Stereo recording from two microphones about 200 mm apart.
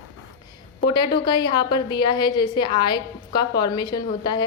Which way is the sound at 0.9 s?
25° left (ahead or behind).